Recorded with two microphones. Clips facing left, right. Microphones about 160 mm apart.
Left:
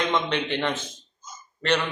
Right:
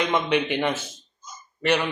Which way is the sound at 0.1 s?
10° right (ahead or behind).